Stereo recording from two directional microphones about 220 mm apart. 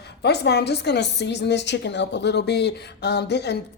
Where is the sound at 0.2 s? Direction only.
50° left (ahead or behind).